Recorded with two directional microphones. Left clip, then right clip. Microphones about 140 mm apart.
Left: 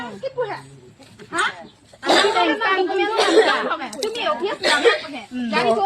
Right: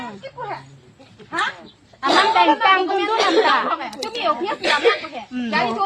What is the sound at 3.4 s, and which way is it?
Speech, 60° right (ahead or behind).